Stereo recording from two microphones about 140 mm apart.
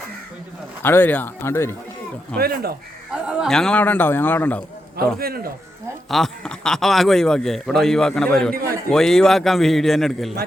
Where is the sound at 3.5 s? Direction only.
5° left (ahead or behind).